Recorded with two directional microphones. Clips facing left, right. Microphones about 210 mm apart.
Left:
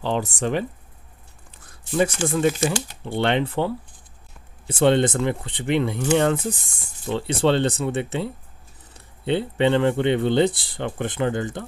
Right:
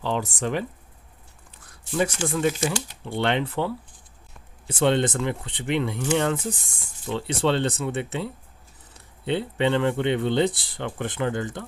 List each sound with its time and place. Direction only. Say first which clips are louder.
0.0 s speech: left 3 dB; 30° left (ahead or behind)
1.9 s speech: left 3 dB; 30° left (ahead or behind)
7.1 s speech: left 3 dB; 30° left (ahead or behind)